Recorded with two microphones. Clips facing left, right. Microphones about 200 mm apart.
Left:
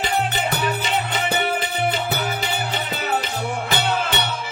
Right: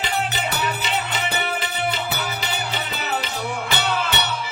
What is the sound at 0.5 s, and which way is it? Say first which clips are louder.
Music: left 2 dB; 50° left (ahead or behind).